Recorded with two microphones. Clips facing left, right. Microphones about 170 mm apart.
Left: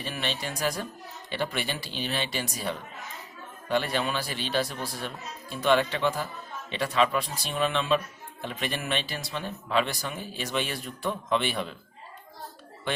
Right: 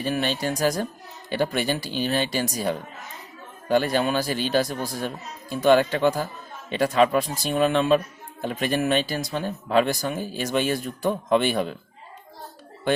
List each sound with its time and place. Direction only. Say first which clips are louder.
0.0 s speech: right 8 dB; 45° right (ahead or behind)